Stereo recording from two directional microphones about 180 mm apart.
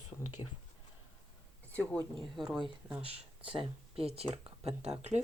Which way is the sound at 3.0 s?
30° right (ahead or behind).